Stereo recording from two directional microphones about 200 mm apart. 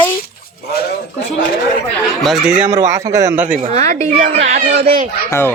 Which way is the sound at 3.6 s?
30° right (ahead or behind).